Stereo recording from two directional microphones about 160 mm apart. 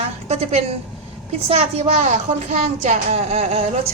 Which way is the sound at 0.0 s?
40° right (ahead or behind).